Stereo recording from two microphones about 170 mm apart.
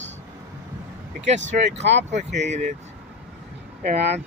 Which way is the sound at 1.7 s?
90° right.